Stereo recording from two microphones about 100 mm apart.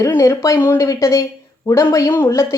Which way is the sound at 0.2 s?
30° left (ahead or behind).